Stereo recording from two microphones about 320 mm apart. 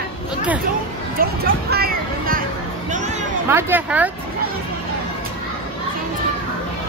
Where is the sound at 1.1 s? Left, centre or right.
Right.